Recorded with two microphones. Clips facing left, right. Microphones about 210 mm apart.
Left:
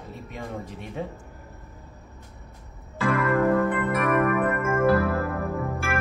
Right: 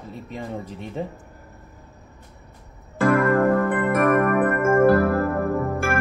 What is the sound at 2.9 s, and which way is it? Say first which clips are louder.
Keyboard: right 5 dB; 50° right (ahead or behind).